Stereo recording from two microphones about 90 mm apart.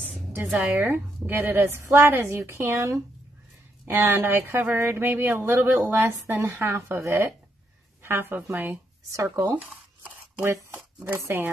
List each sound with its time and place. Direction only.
0.5 s speech: 10° right (ahead or behind)
0.7 s a woman's voice: 25° right (ahead or behind)
10.0 s a sound: 30° right (ahead or behind)
11.1 s speech: 25° right (ahead or behind)